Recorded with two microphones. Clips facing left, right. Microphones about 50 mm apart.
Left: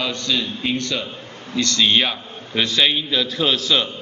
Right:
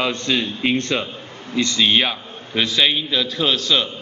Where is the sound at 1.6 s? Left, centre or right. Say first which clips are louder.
Even; centre.